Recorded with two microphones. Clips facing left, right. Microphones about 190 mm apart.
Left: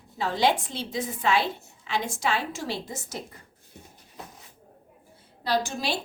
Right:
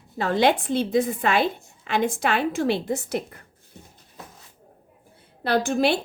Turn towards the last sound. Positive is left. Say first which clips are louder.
# right 6 dB
turn(degrees=-60)  # may be behind; listen again after turning